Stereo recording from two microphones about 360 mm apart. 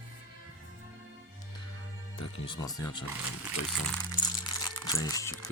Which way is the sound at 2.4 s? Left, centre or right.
Centre.